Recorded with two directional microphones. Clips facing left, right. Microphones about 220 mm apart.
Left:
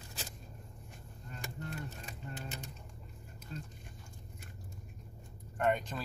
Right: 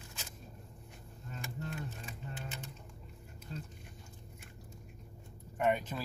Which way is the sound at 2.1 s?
40° left (ahead or behind).